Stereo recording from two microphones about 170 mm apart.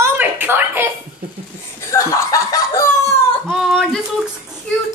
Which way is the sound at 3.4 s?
Centre (ahead or behind).